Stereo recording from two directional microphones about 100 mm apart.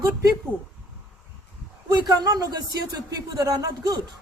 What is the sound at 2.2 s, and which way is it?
A man's voice, 40° right (ahead or behind).